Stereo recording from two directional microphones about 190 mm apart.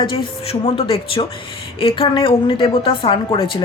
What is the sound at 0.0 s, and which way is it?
A woman's voice, 25° left (ahead or behind).